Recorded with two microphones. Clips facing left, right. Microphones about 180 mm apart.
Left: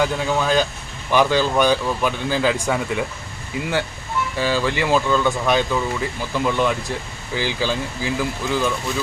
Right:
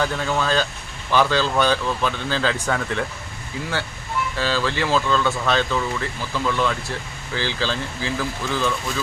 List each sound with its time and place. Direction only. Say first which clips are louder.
0.0 s speech: left 2 dB; 10° left (ahead or behind)
4.4 s speech: left 3 dB; 15° left (ahead or behind)